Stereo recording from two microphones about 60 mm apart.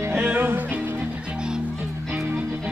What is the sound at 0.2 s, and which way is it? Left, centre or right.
Music, right.